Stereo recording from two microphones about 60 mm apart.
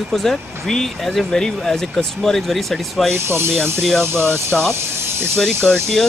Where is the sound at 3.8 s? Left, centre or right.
Centre.